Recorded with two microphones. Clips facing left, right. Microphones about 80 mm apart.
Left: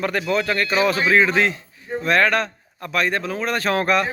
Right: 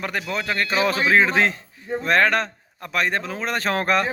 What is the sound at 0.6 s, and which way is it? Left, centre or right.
A man's voice, right.